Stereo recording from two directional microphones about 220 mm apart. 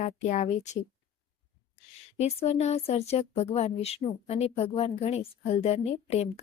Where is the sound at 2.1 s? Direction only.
30° left (ahead or behind).